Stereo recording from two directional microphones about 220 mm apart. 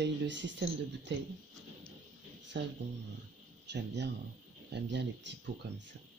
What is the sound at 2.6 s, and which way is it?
Speech, 50° right (ahead or behind).